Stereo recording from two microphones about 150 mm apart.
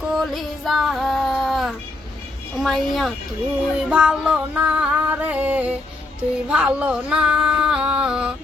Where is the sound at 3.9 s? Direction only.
5° right (ahead or behind).